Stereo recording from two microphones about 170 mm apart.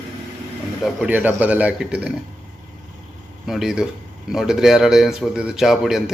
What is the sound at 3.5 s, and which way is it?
Speech, centre (ahead or behind).